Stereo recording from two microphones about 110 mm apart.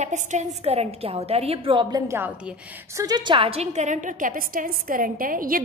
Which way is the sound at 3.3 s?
65° right (ahead or behind).